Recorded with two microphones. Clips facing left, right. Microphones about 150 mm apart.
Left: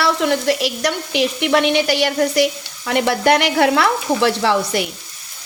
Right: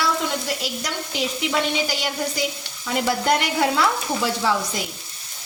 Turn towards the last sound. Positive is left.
turn(degrees=70)  # may be behind; listen again after turning